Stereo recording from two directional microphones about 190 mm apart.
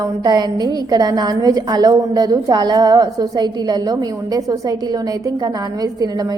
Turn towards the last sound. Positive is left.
turn(degrees=-20)  # may be behind; listen again after turning